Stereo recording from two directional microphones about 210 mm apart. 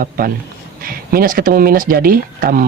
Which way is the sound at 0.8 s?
45° right (ahead or behind).